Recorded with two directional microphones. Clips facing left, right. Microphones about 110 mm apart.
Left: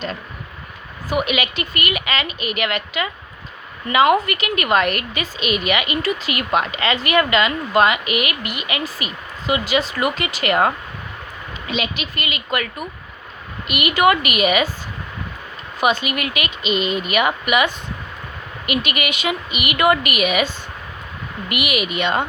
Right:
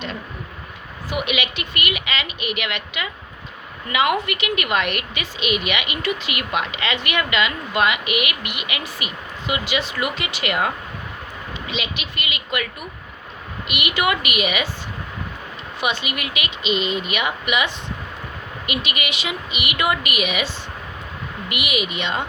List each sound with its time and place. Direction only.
1.1 s a woman's voice: 40° left (ahead or behind)
11.7 s a woman's voice: 45° left (ahead or behind)
13.7 s speech: 45° left (ahead or behind)
15.8 s speech: 45° left (ahead or behind)
21.5 s speech: 55° left (ahead or behind)